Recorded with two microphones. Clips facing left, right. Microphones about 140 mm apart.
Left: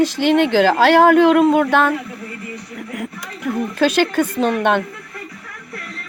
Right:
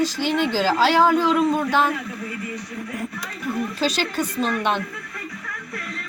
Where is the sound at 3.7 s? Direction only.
55° left (ahead or behind).